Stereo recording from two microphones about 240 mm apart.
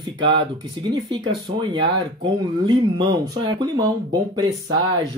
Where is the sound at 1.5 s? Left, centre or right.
Right.